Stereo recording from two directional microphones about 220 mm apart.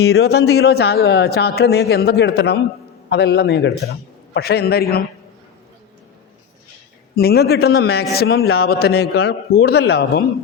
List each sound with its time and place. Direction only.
0.0 s a man's voice: 50° left (ahead or behind)
7.2 s a man's voice: 45° left (ahead or behind)